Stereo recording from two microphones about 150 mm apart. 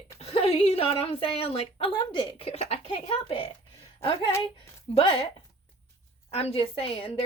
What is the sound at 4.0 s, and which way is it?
A woman's voice, 35° left (ahead or behind).